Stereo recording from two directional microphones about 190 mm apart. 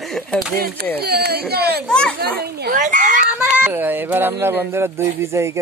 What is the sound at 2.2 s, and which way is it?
Speech, 55° right (ahead or behind).